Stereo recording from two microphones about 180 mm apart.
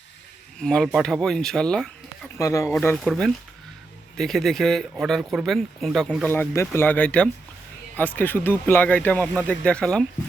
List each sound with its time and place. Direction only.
0.6 s speech: 5° left (ahead or behind)
2.4 s speech: 15° left (ahead or behind)
2.8 s speech: 5° left (ahead or behind)